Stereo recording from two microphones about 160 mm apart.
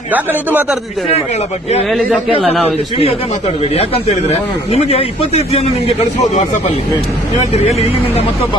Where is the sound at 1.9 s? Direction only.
Centre (ahead or behind).